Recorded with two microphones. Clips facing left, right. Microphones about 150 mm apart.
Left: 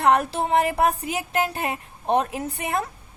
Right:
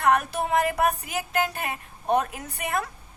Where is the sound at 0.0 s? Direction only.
30° left (ahead or behind).